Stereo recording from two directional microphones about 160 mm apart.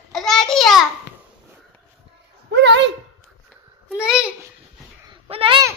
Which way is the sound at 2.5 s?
90° right.